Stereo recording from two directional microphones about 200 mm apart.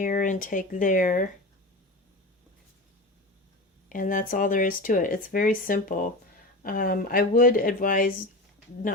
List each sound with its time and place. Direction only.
0.0 s speech: 40° left (ahead or behind)
3.8 s speech: 40° left (ahead or behind)